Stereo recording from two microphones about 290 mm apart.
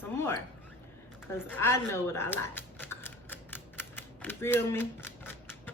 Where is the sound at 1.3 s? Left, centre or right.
Centre.